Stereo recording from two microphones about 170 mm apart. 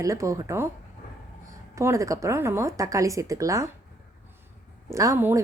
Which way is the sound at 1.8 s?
15° right (ahead or behind).